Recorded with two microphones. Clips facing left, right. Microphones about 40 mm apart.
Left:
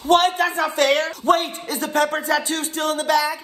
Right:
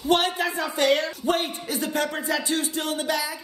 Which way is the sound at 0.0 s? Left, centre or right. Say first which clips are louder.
Left 5 dB; left.